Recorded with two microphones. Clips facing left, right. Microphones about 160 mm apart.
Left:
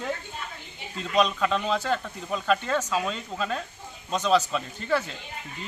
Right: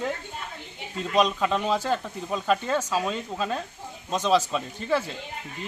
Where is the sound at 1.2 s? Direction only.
15° right (ahead or behind).